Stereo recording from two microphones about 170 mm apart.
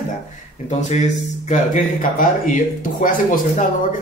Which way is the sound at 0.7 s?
45° left (ahead or behind).